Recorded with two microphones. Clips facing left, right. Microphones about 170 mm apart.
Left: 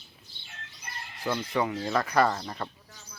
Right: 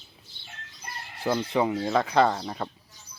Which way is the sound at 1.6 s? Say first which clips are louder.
Right 3 dB; 15° right (ahead or behind).